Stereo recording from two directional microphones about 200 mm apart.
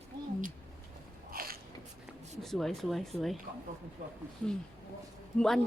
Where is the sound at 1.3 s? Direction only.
45° right (ahead or behind).